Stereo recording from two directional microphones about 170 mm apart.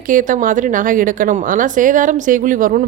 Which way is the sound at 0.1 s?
50° right (ahead or behind).